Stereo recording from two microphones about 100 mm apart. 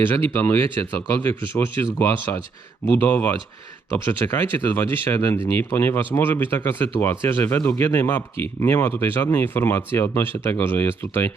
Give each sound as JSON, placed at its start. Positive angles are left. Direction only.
{"t": 0.0, "sound": "speech", "side_deg": 30}